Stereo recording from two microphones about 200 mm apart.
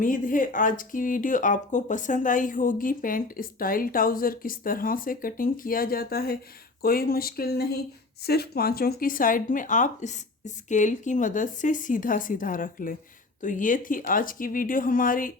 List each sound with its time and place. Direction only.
0.0 s speech: 40° left (ahead or behind)